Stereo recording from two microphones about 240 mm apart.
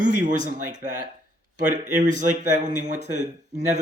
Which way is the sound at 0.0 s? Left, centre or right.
Right.